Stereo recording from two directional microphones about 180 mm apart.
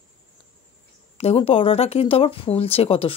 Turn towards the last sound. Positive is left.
turn(degrees=30)  # may be behind; listen again after turning